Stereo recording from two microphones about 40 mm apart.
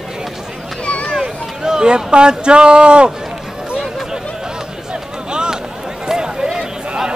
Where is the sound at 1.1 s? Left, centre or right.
Centre.